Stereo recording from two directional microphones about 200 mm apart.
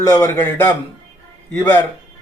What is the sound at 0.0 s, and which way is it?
Speech, 15° left (ahead or behind).